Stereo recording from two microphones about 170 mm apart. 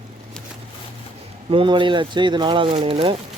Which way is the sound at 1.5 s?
30° right (ahead or behind).